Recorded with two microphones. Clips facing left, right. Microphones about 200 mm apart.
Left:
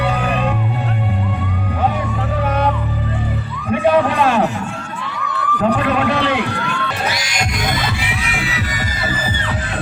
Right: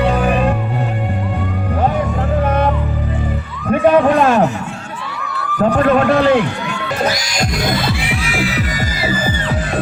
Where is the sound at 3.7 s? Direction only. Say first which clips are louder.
Right 4 dB; 50° right (ahead or behind).